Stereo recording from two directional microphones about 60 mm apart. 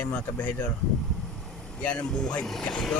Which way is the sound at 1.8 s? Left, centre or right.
Centre.